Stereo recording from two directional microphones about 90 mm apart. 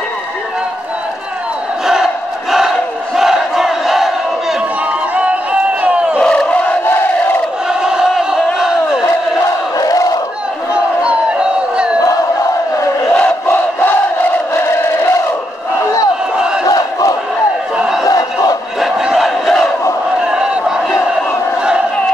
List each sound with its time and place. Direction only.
3.2 s crowd: 5° right (ahead or behind)
5.1 s a sound: 15° right (ahead or behind)
6.1 s crowd: 5° left (ahead or behind)
7.8 s crowd: 5° right (ahead or behind)
9.8 s crowd: 40° left (ahead or behind)
10.7 s crowd: 15° right (ahead or behind)
13.1 s crowd: 20° left (ahead or behind)
15.8 s crowd: 40° left (ahead or behind)
18.0 s battle cry: 40° left (ahead or behind)
18.8 s battle cry: 5° right (ahead or behind)